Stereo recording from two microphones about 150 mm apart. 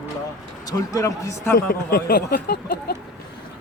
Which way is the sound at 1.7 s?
80° left.